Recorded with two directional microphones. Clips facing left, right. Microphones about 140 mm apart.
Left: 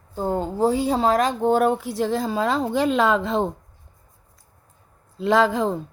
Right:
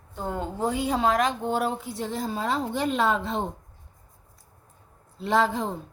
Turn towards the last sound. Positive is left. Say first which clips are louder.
# left 5 dB
turn(degrees=90)